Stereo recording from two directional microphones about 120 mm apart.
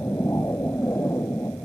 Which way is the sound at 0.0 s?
15° left (ahead or behind).